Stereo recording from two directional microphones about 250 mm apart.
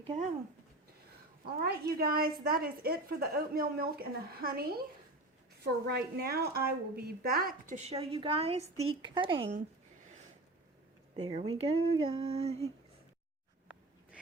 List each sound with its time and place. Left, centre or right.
1.5 s a woman's voice: right
7.9 s speech: right
11.2 s speech: right